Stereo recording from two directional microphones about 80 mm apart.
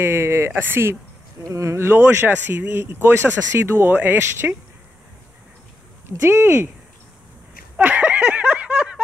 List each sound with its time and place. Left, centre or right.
0.0 s speech: right
1.5 s speech: right
1.9 s speech: right
6.2 s speech: right
7.7 s a sound: right